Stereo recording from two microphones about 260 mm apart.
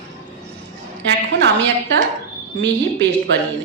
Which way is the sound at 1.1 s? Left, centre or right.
Right.